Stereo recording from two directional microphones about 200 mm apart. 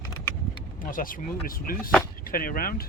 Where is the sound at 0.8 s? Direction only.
40° left (ahead or behind).